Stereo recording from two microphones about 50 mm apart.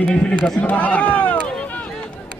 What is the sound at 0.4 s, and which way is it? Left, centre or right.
Speech, left.